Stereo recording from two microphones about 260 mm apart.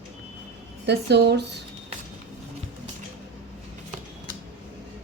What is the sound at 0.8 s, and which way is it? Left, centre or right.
Speech, right.